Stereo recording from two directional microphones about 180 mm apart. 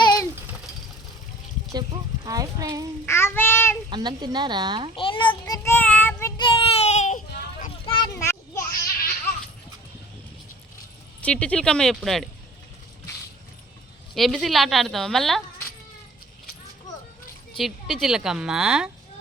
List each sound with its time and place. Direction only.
0.0 s a sound: 25° left (ahead or behind)
2.2 s speech: 20° right (ahead or behind)
3.1 s child singing: 15° left (ahead or behind)
3.8 s speech: 25° right (ahead or behind)
4.9 s a child's voice: 30° left (ahead or behind)
5.6 s child singing: 10° left (ahead or behind)
6.3 s a sound: 25° left (ahead or behind)
7.9 s children playing: 25° left (ahead or behind)
11.2 s speech: 5° left (ahead or behind)
14.2 s speech: centre (ahead or behind)
17.6 s speech: centre (ahead or behind)